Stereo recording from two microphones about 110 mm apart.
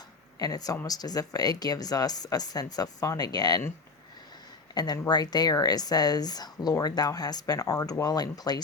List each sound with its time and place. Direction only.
0.3 s speech: 35° left (ahead or behind)
4.7 s speech: 40° left (ahead or behind)